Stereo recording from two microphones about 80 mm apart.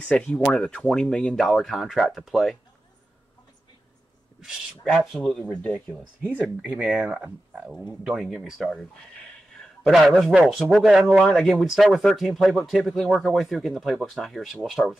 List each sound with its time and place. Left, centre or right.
0.0 s speech: centre
4.9 s speech: centre
5.5 s speech: centre
6.3 s speech: centre
8.2 s speech: centre
9.6 s a sound: centre
10.1 s speech: centre